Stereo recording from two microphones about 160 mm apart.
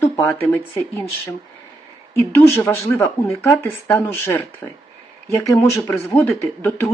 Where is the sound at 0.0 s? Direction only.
15° left (ahead or behind).